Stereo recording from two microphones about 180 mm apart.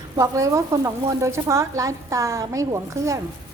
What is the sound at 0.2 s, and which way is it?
Speech, 20° right (ahead or behind).